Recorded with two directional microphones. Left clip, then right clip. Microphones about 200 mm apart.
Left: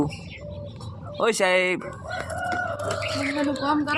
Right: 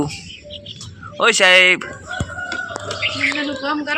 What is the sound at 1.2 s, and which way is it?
Speech, 5° left (ahead or behind).